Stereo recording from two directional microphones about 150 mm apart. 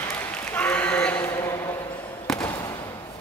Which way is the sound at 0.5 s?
10° left (ahead or behind).